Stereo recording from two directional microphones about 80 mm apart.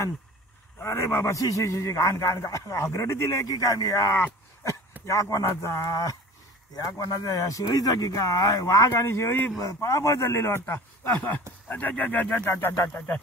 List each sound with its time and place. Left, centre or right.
0.7 s speech: left
6.8 s speech: left
8.9 s speech: left
9.6 s speech: left
10.6 s speech: left
12.4 s speech: left
12.9 s speech: centre